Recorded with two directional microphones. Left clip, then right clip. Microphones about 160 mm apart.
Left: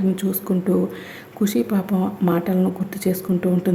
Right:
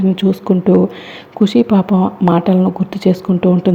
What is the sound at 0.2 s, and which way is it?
Speech, 20° right (ahead or behind).